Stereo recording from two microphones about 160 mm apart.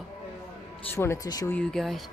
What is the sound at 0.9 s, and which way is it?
Speech, 15° left (ahead or behind).